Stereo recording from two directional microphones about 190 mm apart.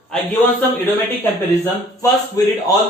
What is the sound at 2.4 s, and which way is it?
Speech, 15° left (ahead or behind).